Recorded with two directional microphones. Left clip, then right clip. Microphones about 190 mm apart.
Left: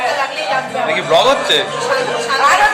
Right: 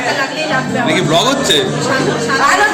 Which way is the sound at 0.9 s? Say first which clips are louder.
Left 2 dB; 55° left (ahead or behind).